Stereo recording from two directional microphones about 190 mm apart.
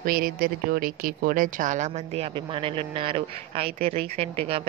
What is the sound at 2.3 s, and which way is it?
Speech, 25° right (ahead or behind).